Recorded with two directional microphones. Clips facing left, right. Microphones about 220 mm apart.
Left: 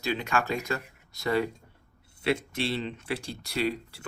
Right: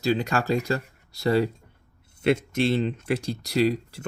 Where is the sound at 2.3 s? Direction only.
45° right (ahead or behind).